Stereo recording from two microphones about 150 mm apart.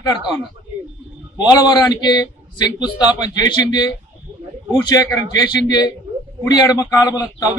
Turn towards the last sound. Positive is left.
turn(degrees=25)  # may be behind; listen again after turning